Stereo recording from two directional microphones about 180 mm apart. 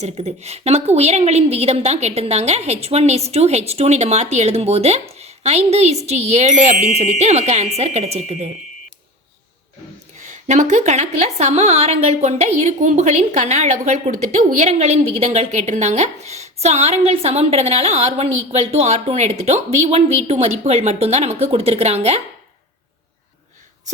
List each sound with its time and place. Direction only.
0.0 s a woman's voice: 35° right (ahead or behind)
10.2 s a woman's voice: 45° right (ahead or behind)